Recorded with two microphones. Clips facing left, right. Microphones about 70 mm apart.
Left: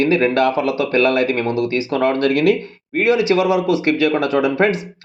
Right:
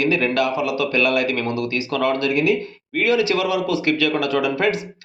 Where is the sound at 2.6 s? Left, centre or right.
Left.